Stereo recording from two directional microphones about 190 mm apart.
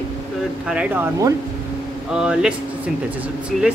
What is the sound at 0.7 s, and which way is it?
Speech, 5° right (ahead or behind).